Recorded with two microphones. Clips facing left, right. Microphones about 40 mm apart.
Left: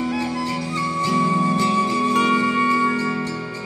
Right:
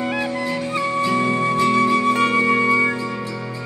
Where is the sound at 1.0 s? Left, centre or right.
Right.